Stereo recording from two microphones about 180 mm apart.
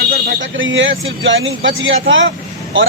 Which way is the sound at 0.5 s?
90° right.